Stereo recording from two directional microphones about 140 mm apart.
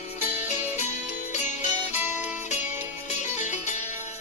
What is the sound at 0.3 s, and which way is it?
Music, 55° left (ahead or behind).